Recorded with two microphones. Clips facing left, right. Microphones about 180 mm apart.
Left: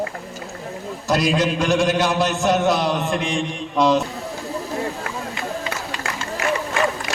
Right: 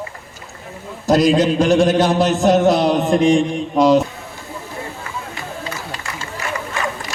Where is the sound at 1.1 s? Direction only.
40° right (ahead or behind).